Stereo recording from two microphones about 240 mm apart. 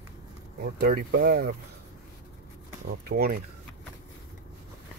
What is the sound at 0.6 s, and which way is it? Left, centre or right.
Speech, right.